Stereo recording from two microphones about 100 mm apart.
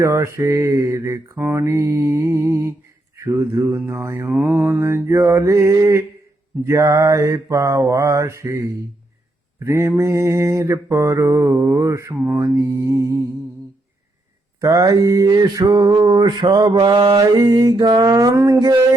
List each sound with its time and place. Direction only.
0.0 s mantra: 30° right (ahead or behind)
14.6 s mantra: 35° right (ahead or behind)